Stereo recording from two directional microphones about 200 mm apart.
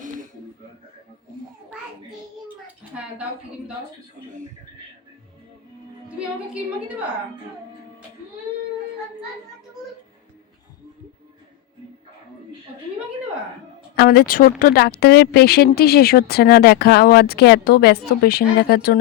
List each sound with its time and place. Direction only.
6.1 s a woman's voice: 5° right (ahead or behind)
13.9 s speech: 50° left (ahead or behind)